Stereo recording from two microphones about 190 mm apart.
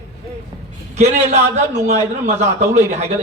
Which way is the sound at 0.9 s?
35° right (ahead or behind).